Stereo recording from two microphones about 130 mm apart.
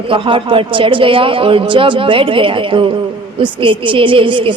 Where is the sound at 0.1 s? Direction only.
40° right (ahead or behind).